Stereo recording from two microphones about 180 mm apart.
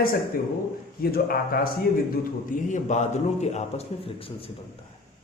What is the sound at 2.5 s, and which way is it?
A man's voice, 40° left (ahead or behind).